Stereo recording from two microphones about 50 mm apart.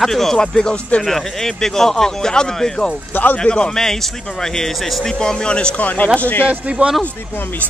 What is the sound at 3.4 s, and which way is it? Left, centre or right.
Speech, centre.